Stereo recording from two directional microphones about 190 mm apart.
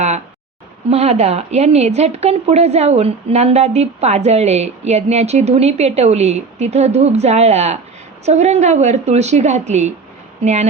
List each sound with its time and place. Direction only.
0.9 s a woman's voice: 35° right (ahead or behind)